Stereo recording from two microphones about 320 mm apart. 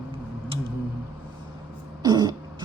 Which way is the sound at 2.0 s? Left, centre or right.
Centre.